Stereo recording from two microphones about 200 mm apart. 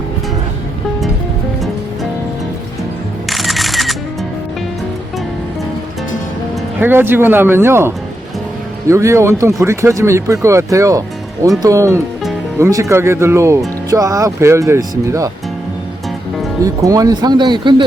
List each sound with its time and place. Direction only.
3.2 s camera: centre (ahead or behind)
6.7 s speech: 10° right (ahead or behind)
16.6 s speech: 15° right (ahead or behind)